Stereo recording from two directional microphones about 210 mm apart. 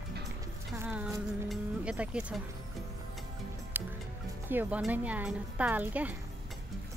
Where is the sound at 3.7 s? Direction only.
10° right (ahead or behind).